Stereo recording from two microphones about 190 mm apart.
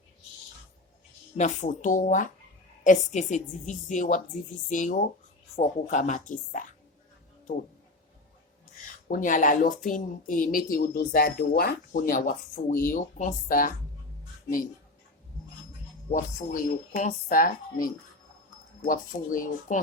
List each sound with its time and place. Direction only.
1.4 s a woman's voice: 40° left (ahead or behind)
9.0 s a woman's voice: 45° left (ahead or behind)
16.0 s a woman's voice: 45° left (ahead or behind)